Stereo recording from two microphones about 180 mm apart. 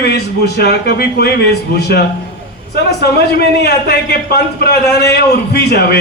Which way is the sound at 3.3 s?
60° left (ahead or behind).